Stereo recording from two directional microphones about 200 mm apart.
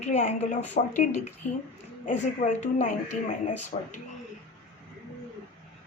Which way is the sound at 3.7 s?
45° left (ahead or behind).